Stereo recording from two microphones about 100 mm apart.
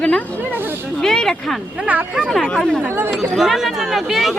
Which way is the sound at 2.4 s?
5° left (ahead or behind).